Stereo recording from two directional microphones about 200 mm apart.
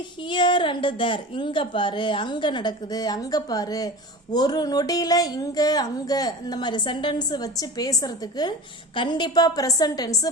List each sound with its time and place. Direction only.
0.2 s a woman's voice: 25° left (ahead or behind)